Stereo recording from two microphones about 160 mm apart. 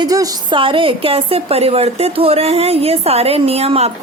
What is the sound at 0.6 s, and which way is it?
A woman's voice, 35° right (ahead or behind).